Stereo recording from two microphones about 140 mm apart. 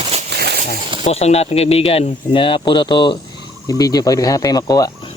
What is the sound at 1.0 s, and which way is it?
Speech, 50° left (ahead or behind).